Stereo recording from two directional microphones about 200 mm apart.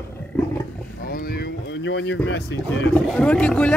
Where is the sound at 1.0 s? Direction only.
50° left (ahead or behind).